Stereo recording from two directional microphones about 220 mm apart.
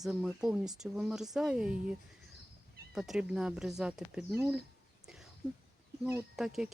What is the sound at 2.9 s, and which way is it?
Speech, centre (ahead or behind).